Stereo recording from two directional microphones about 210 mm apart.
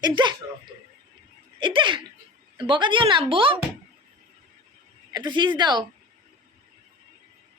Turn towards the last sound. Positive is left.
turn(degrees=-20)  # may be behind; listen again after turning